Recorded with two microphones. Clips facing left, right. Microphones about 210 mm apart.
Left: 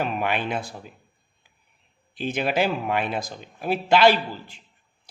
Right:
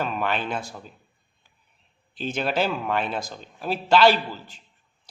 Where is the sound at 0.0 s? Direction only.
15° left (ahead or behind).